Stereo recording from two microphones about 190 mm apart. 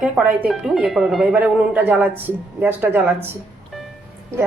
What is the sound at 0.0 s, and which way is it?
Speech, 5° right (ahead or behind).